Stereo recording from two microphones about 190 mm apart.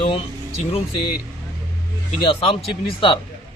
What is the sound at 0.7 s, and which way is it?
Speech, 30° left (ahead or behind).